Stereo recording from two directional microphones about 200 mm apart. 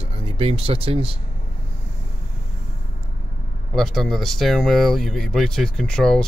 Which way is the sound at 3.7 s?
Centre (ahead or behind).